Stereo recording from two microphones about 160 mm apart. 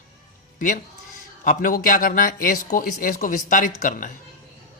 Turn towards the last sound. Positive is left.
turn(degrees=55)  # may be behind; listen again after turning